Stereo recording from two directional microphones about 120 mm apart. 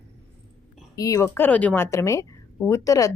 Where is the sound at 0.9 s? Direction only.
30° left (ahead or behind); by 1.9 s 15° left (ahead or behind).